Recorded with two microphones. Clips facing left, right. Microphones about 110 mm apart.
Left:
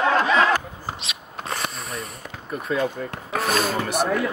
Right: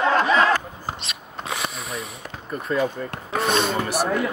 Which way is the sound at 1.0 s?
Centre (ahead or behind).